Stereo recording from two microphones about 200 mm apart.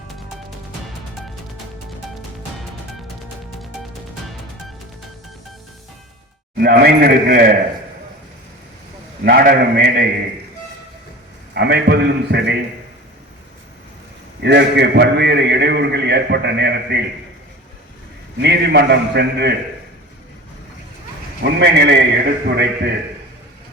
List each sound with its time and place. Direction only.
6.6 s a man's voice: 50° right (ahead or behind)
9.2 s a man's voice: 45° right (ahead or behind)
11.5 s a man's voice: 55° right (ahead or behind)
14.4 s a man's voice: 60° right (ahead or behind)
18.4 s a man's voice: 55° right (ahead or behind)
21.4 s a man's voice: 60° right (ahead or behind)